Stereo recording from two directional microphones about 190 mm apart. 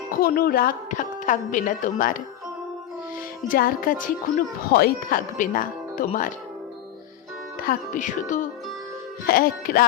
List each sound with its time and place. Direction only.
0.2 s a woman's voice: 50° left (ahead or behind)
3.5 s a woman's voice: 45° left (ahead or behind)
7.6 s a woman's voice: 45° left (ahead or behind)